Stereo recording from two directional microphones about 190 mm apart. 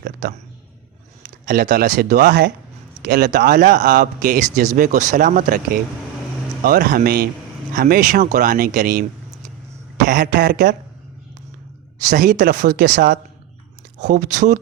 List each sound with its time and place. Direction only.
0.0 s a sound: 55° right (ahead or behind)
1.5 s speech: 50° right (ahead or behind)
3.6 s speech: 40° right (ahead or behind)
6.7 s speech: 45° right (ahead or behind)
10.1 s speech: 50° right (ahead or behind)
11.9 s speech: 45° right (ahead or behind)
14.0 s speech: 40° right (ahead or behind)